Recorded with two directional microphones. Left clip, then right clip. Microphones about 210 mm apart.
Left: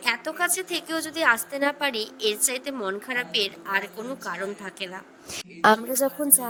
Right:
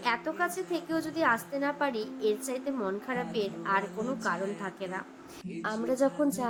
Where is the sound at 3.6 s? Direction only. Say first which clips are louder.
Left 2 dB; centre (ahead or behind).